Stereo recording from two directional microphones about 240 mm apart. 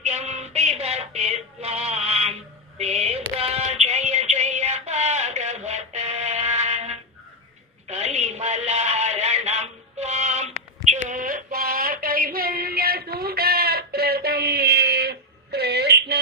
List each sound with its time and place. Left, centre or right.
0.0 s music: right
2.7 s female singing: right
7.9 s a sound: right